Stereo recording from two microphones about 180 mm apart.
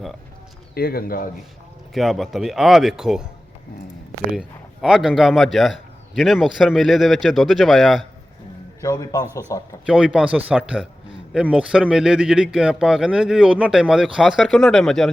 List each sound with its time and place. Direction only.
0.7 s speech: 60° left (ahead or behind)
1.9 s speech: centre (ahead or behind)
4.3 s speech: centre (ahead or behind)
8.8 s speech: 20° left (ahead or behind)
9.8 s speech: 5° right (ahead or behind)